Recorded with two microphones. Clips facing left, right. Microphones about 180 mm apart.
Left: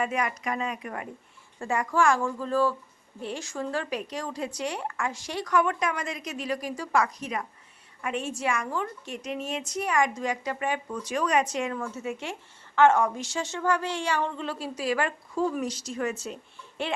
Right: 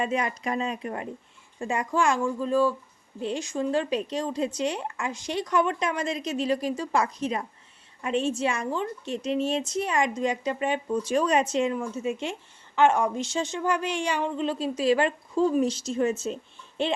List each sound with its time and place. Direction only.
0.0 s a woman's voice: 25° right (ahead or behind)